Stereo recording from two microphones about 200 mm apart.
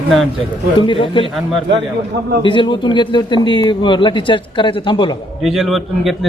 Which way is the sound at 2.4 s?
25° left (ahead or behind).